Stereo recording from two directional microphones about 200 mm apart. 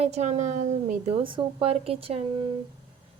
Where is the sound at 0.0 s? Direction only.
35° right (ahead or behind).